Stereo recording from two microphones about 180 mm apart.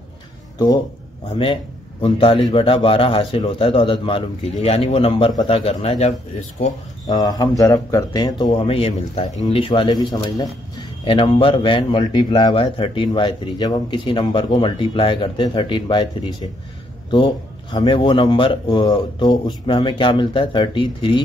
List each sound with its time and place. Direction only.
1.4 s a man's voice: 30° left (ahead or behind)
7.1 s a man's voice: 20° left (ahead or behind)